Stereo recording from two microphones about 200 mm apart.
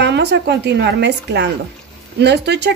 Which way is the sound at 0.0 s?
55° right (ahead or behind).